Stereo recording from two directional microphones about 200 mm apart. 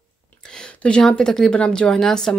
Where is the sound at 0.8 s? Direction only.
5° left (ahead or behind).